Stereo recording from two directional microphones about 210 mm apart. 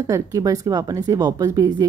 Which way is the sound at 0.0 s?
15° right (ahead or behind).